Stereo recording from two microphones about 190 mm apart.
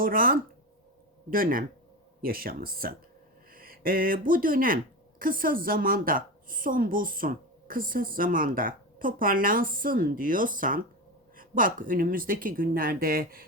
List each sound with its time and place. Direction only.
0.0 s a woman's voice: 50° right (ahead or behind)